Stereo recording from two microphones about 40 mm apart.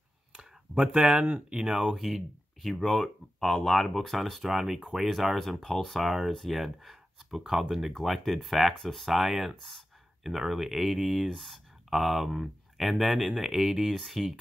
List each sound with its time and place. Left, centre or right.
0.9 s speech: right
2.0 s speech: centre
2.8 s speech: centre
9.6 s speech: centre
10.5 s speech: centre
11.3 s speech: centre
13.9 s speech: centre